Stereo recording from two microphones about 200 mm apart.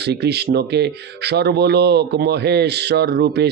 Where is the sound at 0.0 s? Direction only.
55° right (ahead or behind).